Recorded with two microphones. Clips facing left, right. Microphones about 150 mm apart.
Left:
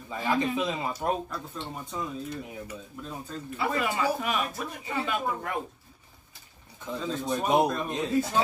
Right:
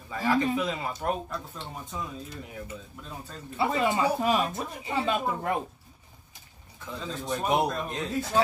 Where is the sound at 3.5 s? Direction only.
25° right (ahead or behind).